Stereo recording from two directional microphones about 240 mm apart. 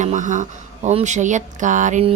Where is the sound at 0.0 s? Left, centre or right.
Right.